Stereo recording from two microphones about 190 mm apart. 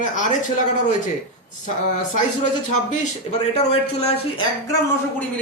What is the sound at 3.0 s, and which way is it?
A woman's voice, 35° left (ahead or behind).